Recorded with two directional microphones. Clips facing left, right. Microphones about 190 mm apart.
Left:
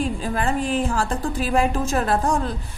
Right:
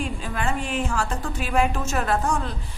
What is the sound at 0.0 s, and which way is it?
A woman's voice, 35° left (ahead or behind).